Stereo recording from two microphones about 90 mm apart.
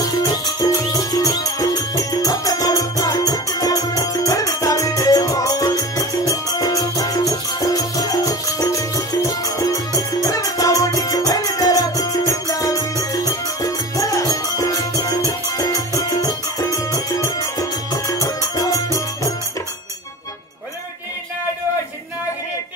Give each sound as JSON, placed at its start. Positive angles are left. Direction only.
{"t": 0.0, "sound": "music", "side_deg": 40}